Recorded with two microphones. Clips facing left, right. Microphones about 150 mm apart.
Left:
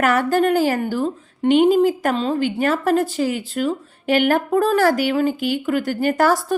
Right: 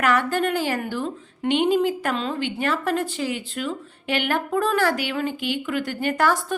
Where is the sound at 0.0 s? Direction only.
40° left (ahead or behind).